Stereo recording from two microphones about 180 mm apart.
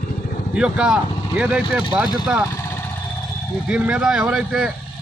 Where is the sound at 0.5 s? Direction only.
5° right (ahead or behind).